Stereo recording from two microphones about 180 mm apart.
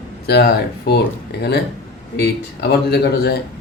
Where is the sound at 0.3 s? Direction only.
65° left (ahead or behind).